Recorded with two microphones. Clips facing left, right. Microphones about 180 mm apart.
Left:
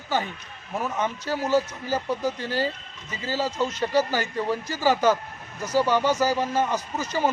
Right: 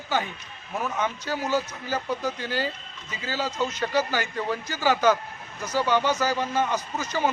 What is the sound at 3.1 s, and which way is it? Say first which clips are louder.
Speech: left 3 dB; 30° left (ahead or behind).